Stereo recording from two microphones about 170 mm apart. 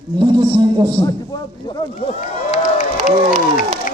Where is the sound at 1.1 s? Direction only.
25° left (ahead or behind).